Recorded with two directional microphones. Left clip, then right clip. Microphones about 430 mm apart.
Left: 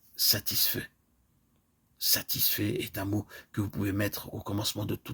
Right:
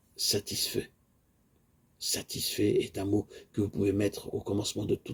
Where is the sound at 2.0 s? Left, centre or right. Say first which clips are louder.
Left 4 dB; left.